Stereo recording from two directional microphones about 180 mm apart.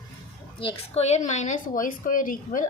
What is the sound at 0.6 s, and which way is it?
A woman's voice, 30° left (ahead or behind).